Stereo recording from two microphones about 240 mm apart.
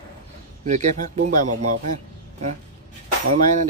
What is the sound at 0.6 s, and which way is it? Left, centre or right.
Speech, right.